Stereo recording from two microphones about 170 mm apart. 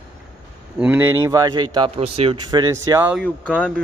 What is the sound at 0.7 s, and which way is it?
A man's voice, 10° right (ahead or behind).